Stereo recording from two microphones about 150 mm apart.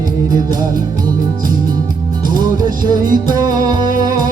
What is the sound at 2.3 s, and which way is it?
Music, 30° right (ahead or behind).